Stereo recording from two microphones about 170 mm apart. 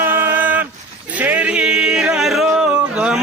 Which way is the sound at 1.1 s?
10° right (ahead or behind).